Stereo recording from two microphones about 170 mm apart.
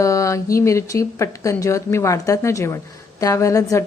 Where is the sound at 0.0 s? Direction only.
20° left (ahead or behind).